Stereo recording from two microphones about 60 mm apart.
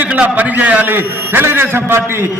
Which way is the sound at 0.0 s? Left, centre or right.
Right.